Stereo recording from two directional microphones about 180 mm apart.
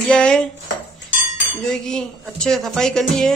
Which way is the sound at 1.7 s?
5° left (ahead or behind).